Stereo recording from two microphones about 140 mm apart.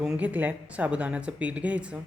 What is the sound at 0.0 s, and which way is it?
Speech, 5° right (ahead or behind).